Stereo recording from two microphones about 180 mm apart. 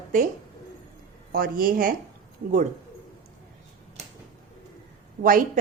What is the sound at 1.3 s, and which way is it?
Speech, 55° right (ahead or behind).